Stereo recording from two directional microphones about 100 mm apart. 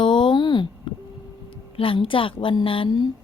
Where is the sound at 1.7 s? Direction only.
65° left (ahead or behind).